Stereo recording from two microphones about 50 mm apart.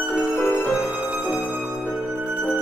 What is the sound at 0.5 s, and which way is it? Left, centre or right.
Music, left.